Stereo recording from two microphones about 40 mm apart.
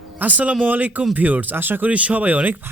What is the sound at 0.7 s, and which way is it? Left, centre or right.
Speech, right.